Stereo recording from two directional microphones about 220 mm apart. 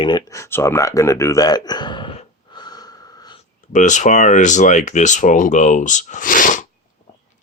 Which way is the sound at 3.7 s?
35° left (ahead or behind).